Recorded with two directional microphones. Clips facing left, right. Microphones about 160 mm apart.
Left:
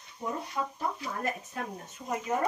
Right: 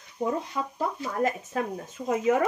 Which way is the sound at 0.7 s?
90° right.